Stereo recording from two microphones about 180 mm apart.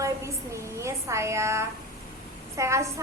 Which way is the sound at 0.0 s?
15° right (ahead or behind).